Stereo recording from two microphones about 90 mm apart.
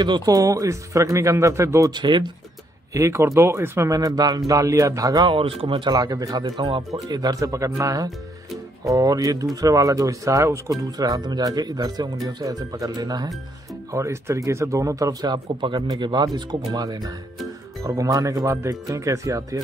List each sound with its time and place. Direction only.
0.0 s speech: 45° right (ahead or behind)
1.9 s speech: 60° right (ahead or behind)
2.9 s speech: 35° right (ahead or behind)
3.9 s speech: 45° right (ahead or behind)
5.2 s speech: 80° right
5.9 s speech: 45° right (ahead or behind)
6.4 s speech: 60° right (ahead or behind)
7.1 s speech: 45° right (ahead or behind)
13.9 s speech: 35° right (ahead or behind)
15.9 s speech: 55° right (ahead or behind); by 19.6 s 35° right (ahead or behind)